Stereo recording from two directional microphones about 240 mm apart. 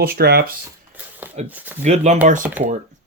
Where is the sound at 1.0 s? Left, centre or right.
Centre.